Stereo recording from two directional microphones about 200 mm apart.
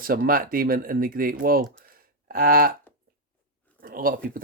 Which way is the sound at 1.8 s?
45° right (ahead or behind).